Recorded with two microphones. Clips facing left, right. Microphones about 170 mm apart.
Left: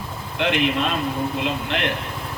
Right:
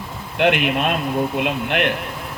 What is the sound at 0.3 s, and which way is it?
A man's voice, 60° right (ahead or behind).